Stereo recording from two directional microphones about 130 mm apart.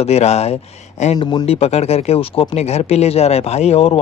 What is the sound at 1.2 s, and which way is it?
Speech, 45° left (ahead or behind).